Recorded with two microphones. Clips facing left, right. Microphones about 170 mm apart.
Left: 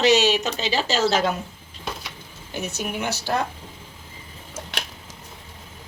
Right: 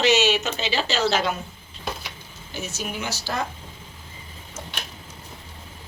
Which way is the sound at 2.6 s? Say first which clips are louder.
Left 3 dB; 60° left (ahead or behind).